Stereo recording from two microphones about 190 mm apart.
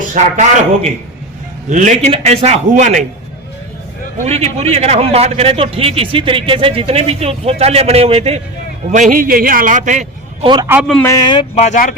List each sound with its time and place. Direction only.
0.1 s a man's voice: 40° right (ahead or behind)
4.2 s a man's voice: 35° right (ahead or behind)
8.9 s a man's voice: 45° right (ahead or behind)
10.4 s a man's voice: 25° right (ahead or behind)
10.7 s a man's voice: 5° right (ahead or behind)
11.0 s speech: 20° left (ahead or behind)
11.5 s speech: 40° left (ahead or behind)